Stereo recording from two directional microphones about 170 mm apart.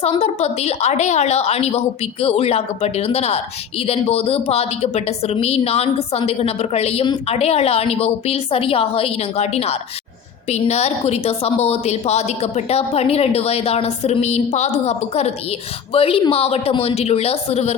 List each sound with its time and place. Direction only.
0.0 s speech: 40° left (ahead or behind)